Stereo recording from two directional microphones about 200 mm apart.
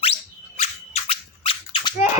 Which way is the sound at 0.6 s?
30° left (ahead or behind).